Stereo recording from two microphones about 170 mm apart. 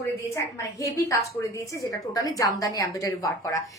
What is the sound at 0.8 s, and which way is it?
A woman's voice, 20° left (ahead or behind).